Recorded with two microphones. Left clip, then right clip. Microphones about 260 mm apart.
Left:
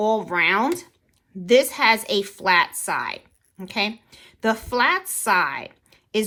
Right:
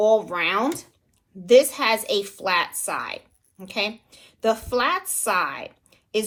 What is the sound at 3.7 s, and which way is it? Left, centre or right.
A woman's voice, left.